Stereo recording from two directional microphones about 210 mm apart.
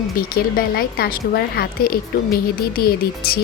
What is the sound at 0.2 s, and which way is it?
Speech, 45° left (ahead or behind).